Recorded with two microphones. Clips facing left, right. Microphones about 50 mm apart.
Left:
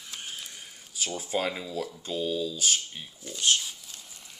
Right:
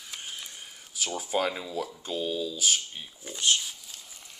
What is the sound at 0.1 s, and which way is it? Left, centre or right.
Mechanisms, centre.